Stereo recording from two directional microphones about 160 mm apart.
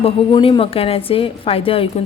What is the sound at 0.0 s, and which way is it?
A woman's voice, 30° left (ahead or behind).